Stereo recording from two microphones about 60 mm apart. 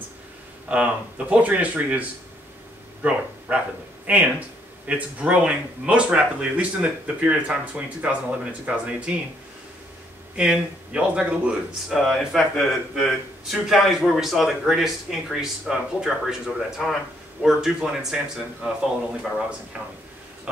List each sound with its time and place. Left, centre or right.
0.7 s speech: right
10.3 s speech: centre
11.9 s a man's voice: centre